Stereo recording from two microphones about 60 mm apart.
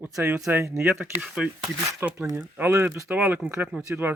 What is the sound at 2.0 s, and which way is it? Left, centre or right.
Speech, right.